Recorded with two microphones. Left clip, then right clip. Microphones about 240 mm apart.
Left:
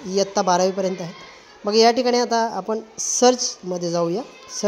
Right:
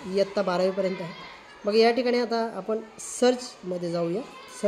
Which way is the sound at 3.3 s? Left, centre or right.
Centre.